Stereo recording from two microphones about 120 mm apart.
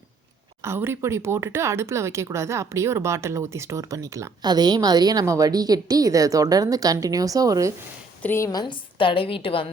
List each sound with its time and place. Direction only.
0.6 s speech: 20° right (ahead or behind)
8.2 s a woman's voice: 15° left (ahead or behind)
8.4 s a woman's voice: 40° left (ahead or behind)